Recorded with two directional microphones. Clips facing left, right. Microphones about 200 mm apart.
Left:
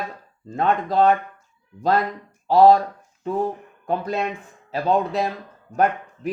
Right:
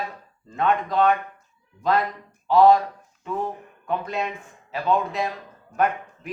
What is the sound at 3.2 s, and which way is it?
Speech, 35° left (ahead or behind).